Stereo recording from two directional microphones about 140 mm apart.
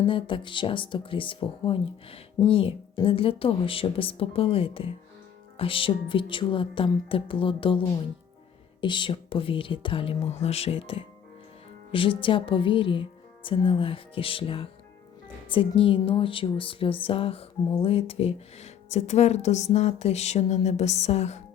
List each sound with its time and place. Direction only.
0.0 s speech: 40° left (ahead or behind)
8.8 s a woman's voice: 35° left (ahead or behind); by 21.4 s 50° left (ahead or behind)